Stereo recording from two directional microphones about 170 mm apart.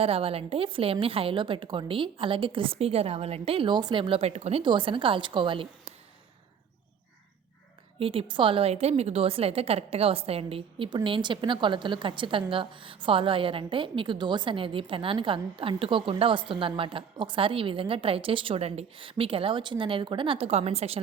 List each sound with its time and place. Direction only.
0.0 s a woman's voice: 35° right (ahead or behind)
7.9 s a woman's voice: 35° right (ahead or behind)